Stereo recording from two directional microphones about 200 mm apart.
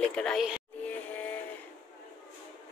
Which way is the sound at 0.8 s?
10° left (ahead or behind).